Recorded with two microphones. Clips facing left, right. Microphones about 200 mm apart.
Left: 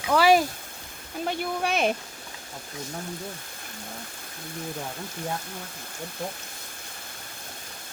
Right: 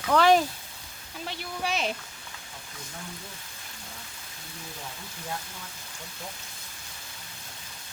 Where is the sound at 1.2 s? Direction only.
50° left (ahead or behind).